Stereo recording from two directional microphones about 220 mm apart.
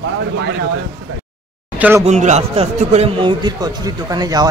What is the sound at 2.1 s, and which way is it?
A man's voice, 30° right (ahead or behind).